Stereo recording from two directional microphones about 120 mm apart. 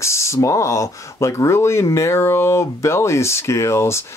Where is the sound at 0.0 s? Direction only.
25° left (ahead or behind).